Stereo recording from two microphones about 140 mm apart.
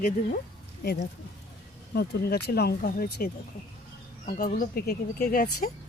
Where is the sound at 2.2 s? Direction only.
90° left.